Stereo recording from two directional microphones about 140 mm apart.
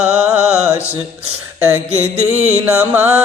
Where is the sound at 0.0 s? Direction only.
10° right (ahead or behind).